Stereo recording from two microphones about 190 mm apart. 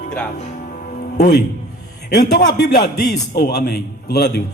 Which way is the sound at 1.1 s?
55° left (ahead or behind).